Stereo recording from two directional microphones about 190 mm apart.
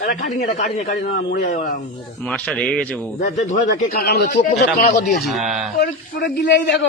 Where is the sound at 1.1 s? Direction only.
65° left (ahead or behind).